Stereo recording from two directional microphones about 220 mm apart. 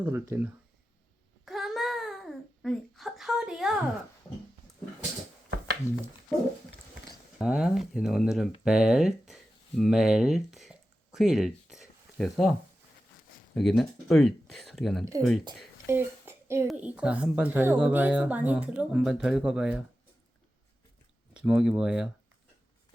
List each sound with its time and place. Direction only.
0.0 s speech: 10° right (ahead or behind)
1.5 s babbling: centre (ahead or behind)
7.4 s speech: 5° right (ahead or behind)
8.6 s a sound: 5° right (ahead or behind)
13.5 s speech: centre (ahead or behind)
15.9 s a sound: 10° right (ahead or behind)
16.6 s speech: 5° right (ahead or behind)
21.3 s speech: 5° right (ahead or behind)